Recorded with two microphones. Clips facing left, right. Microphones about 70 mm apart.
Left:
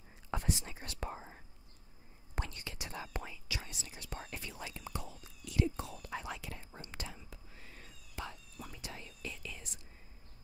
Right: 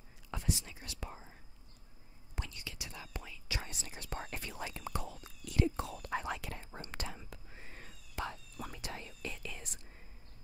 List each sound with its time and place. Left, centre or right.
0.3 s speech: left
3.4 s speech: right
5.8 s speech: right
7.5 s cat: right
7.8 s whispering: right